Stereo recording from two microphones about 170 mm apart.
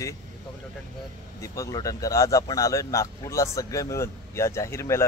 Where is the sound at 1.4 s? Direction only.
20° left (ahead or behind).